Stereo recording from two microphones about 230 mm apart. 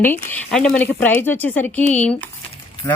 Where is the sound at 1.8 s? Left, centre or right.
Left.